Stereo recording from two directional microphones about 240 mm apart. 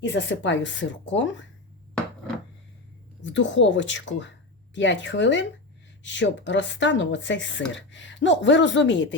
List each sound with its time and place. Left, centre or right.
0.0 s speech: left
3.2 s speech: left